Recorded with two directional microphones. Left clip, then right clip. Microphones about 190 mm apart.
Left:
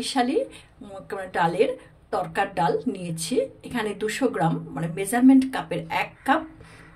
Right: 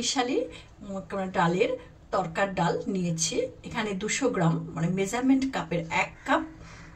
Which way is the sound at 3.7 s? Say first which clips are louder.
Left 3 dB; 55° left (ahead or behind).